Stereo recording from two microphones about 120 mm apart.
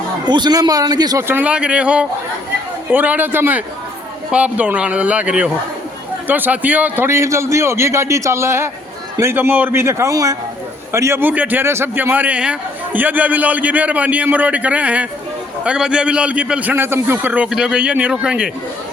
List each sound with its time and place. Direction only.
0.3 s a man's voice: 35° right (ahead or behind)
1.3 s a man's voice: 10° right (ahead or behind)